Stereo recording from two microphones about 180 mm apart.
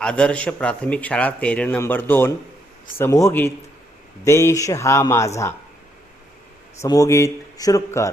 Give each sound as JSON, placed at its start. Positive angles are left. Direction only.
{"t": 0.0, "sound": "speech", "side_deg": 5}
{"t": 6.8, "sound": "speech", "side_deg": 20}